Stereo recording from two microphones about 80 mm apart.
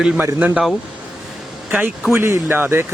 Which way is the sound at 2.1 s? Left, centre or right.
Right.